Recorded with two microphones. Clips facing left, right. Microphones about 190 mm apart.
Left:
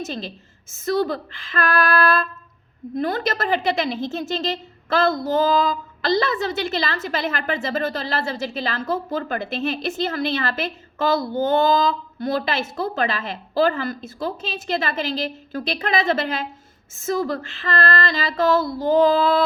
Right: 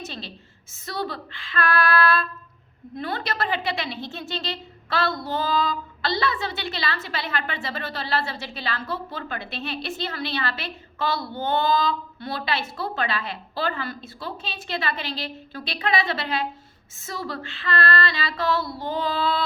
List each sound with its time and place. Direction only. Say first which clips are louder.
0.0 s speech: left 7 dB; 45° left (ahead or behind)